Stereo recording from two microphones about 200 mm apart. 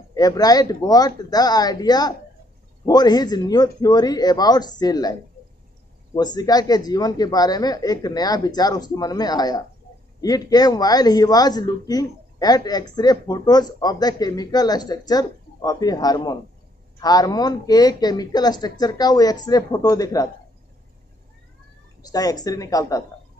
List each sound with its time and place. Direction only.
0.1 s a man's voice: 20° left (ahead or behind)
6.1 s a man's voice: 20° left (ahead or behind)
22.0 s a woman's voice: 20° left (ahead or behind)